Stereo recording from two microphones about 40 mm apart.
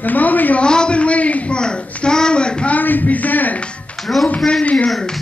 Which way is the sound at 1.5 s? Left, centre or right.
Left.